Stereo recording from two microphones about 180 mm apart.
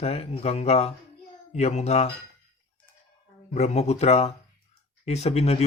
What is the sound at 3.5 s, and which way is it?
Speech, 40° left (ahead or behind).